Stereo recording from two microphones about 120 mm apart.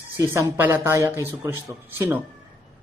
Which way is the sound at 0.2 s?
20° right (ahead or behind).